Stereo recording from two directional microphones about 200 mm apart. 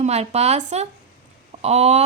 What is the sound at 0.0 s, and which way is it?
A woman's voice, 30° right (ahead or behind).